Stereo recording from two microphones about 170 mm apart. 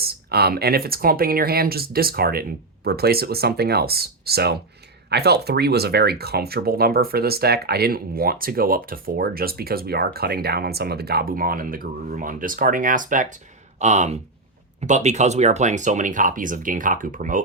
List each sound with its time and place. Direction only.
0.0 s speech: 65° right (ahead or behind); by 17.4 s 50° right (ahead or behind)